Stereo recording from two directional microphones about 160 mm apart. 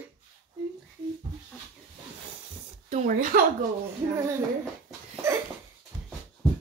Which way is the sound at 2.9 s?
45° right (ahead or behind).